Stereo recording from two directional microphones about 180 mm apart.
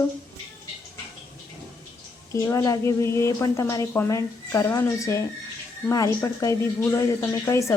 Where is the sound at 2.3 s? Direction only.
15° left (ahead or behind).